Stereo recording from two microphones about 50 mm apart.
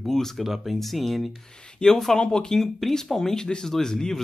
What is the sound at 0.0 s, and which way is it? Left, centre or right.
Speech, centre.